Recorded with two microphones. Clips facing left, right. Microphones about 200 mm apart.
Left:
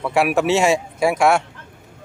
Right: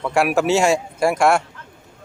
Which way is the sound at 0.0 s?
Centre (ahead or behind).